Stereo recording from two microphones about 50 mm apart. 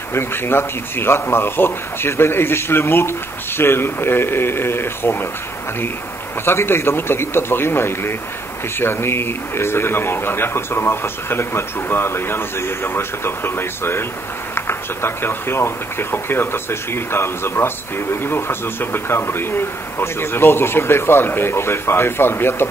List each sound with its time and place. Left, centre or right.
0.1 s speech: left
6.4 s speech: left